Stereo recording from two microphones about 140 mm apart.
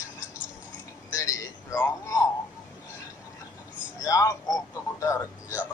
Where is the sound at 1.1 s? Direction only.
20° left (ahead or behind).